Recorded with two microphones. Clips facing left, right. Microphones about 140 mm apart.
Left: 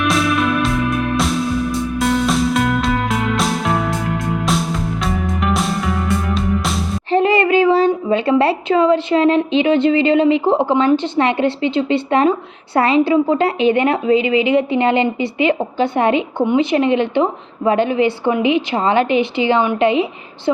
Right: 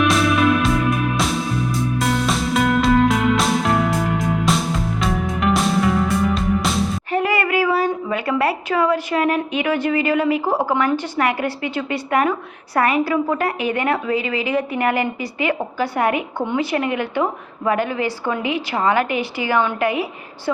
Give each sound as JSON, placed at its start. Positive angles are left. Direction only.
{"t": 0.0, "sound": "music", "side_deg": 0}
{"t": 7.1, "sound": "a child's voice", "side_deg": 25}